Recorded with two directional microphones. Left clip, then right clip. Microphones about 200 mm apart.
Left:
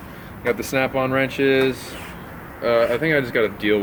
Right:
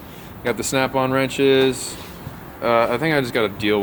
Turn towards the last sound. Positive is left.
turn(degrees=-35)  # may be behind; listen again after turning